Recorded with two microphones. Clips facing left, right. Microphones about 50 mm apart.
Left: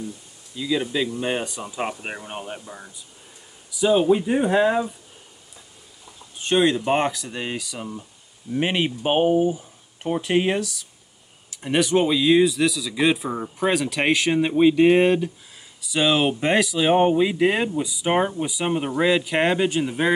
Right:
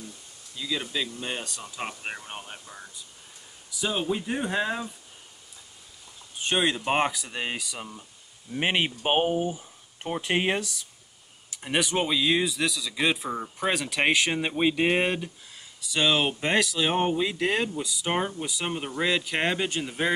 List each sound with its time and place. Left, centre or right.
0.6 s speech: centre
3.7 s speech: centre
6.4 s speech: centre
11.6 s speech: centre